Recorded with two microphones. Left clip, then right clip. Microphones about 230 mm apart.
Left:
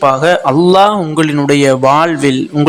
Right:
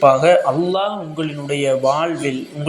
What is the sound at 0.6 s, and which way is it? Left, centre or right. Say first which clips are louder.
A man's voice: left 12 dB; left.